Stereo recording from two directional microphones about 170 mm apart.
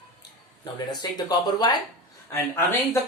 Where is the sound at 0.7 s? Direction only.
25° left (ahead or behind).